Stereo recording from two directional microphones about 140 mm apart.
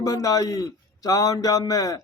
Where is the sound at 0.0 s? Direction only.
25° left (ahead or behind).